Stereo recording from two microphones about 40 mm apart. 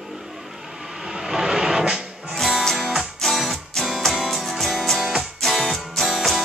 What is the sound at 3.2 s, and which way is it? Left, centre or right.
Music, centre.